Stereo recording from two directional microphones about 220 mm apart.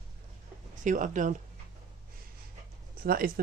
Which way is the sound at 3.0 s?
40° right (ahead or behind).